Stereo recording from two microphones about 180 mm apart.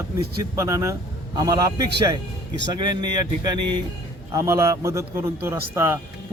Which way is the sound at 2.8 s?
25° right (ahead or behind).